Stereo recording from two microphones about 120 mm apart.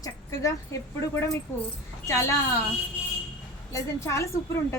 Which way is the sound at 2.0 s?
25° left (ahead or behind).